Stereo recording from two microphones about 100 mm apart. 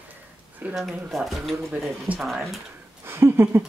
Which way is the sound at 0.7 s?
Centre (ahead or behind).